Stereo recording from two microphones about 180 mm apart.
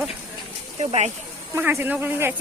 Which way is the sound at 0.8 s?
35° right (ahead or behind).